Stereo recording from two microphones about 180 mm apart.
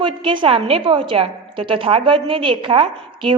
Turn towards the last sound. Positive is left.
turn(degrees=-30)  # may be behind; listen again after turning